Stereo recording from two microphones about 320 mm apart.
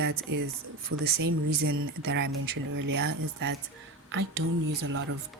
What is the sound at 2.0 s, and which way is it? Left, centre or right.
Speech, right.